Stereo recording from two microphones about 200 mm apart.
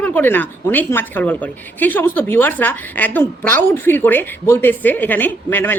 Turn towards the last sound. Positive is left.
turn(degrees=10)  # may be behind; listen again after turning